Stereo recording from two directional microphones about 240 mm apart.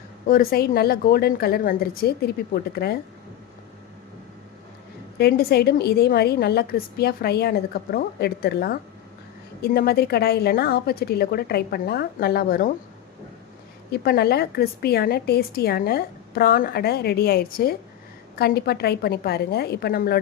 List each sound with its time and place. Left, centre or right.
0.3 s a woman's voice: left
5.1 s a woman's voice: left
13.9 s a woman's voice: left